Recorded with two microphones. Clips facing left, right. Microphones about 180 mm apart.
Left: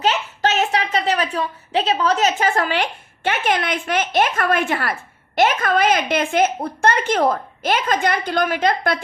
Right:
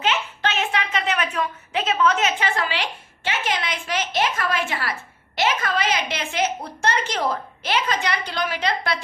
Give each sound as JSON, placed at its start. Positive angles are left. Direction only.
{"t": 0.0, "sound": "a child's voice", "side_deg": 40}